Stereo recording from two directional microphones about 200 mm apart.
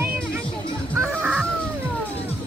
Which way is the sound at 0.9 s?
10° right (ahead or behind).